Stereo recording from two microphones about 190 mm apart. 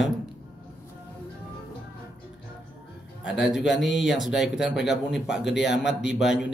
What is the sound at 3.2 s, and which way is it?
Speech, 5° right (ahead or behind).